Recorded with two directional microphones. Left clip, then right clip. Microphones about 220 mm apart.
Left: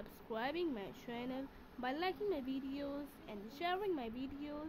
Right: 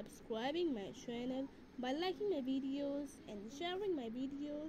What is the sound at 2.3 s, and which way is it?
Speech, 25° left (ahead or behind).